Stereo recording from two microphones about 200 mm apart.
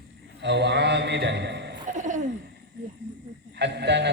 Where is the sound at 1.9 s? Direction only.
40° right (ahead or behind).